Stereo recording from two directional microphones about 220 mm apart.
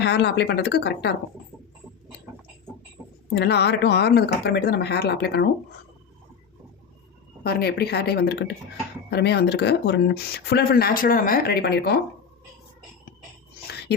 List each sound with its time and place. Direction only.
0.0 s speech: 50° left (ahead or behind)
3.3 s speech: 50° left (ahead or behind)
7.4 s speech: 45° left (ahead or behind)